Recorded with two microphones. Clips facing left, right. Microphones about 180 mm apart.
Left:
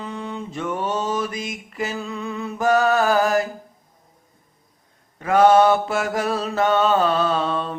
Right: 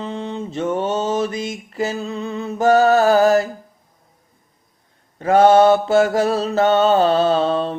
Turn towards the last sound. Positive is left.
turn(degrees=-30)  # may be behind; listen again after turning